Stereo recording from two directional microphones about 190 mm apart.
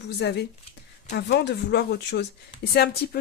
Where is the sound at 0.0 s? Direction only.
60° left (ahead or behind).